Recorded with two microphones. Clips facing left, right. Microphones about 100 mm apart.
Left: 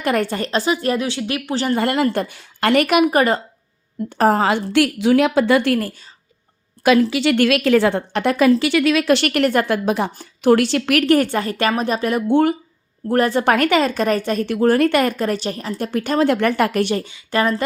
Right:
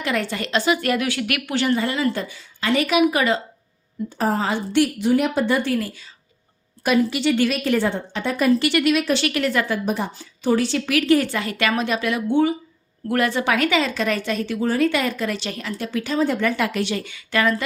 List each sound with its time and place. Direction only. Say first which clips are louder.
0.0 s a woman's voice: left 5 dB; 50° left (ahead or behind); by 1.7 s 30° left (ahead or behind)
1.7 s a woman's voice: left 7 dB; 55° left (ahead or behind)
4.2 s a woman's voice: left 6 dB; 65° left (ahead or behind)
6.8 s a woman's voice: left 4 dB; 90° left
9.0 s a woman's voice: left 5 dB; 60° left (ahead or behind)
9.7 s a woman's voice: left 4 dB; 90° left
10.4 s a woman's voice: left 5 dB; 70° left (ahead or behind); by 12.2 s 40° left (ahead or behind)
12.3 s a woman's voice: left 3 dB; 60° left (ahead or behind)
13.1 s a woman's voice: left 4 dB; 40° left (ahead or behind)
13.4 s a woman's voice: left 4 dB; 50° left (ahead or behind); by 15.7 s 35° left (ahead or behind)
15.8 s a woman's voice: left 4 dB; 50° left (ahead or behind)
17.0 s a woman's voice: left 2 dB; 30° left (ahead or behind)